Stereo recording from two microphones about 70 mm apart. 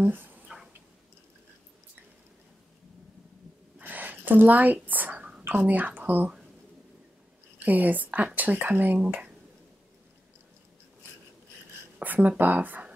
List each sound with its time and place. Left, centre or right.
0.0 s speech: right
3.7 s a sound: right
5.5 s speech: right
7.5 s speech: right
12.0 s speech: right